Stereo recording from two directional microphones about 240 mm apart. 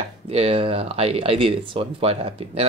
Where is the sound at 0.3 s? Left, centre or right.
Right.